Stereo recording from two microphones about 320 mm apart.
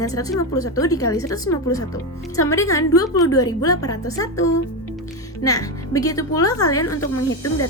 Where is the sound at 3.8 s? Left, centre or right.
Left.